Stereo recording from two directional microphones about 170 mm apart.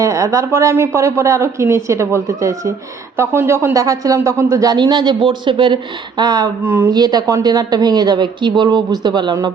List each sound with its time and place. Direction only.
0.0 s speech: 20° right (ahead or behind)
6.6 s speech: 15° right (ahead or behind)